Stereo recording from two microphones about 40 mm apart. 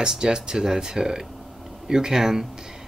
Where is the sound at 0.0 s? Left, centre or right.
Centre.